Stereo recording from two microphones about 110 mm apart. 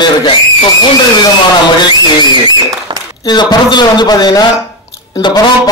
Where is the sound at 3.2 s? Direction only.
40° left (ahead or behind).